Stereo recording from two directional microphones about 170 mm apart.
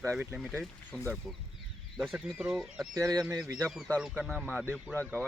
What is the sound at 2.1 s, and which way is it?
Speech, 10° right (ahead or behind).